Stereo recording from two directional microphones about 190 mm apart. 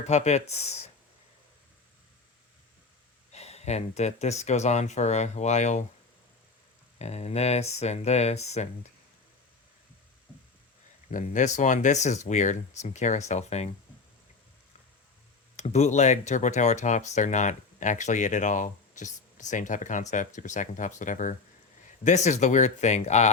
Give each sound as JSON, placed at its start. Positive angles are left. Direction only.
{"t": 0.1, "sound": "speech", "side_deg": 35}
{"t": 3.3, "sound": "speech", "side_deg": 35}
{"t": 7.0, "sound": "speech", "side_deg": 35}
{"t": 11.1, "sound": "speech", "side_deg": 40}
{"t": 15.5, "sound": "speech", "side_deg": 35}